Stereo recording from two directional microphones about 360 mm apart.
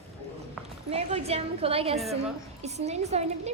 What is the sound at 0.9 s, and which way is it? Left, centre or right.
A woman's voice, centre.